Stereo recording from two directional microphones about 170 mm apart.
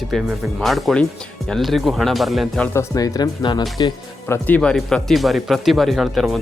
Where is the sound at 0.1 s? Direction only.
5° right (ahead or behind).